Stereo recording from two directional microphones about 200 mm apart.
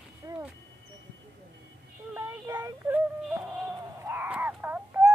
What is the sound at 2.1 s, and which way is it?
Synthetic singing, 10° right (ahead or behind).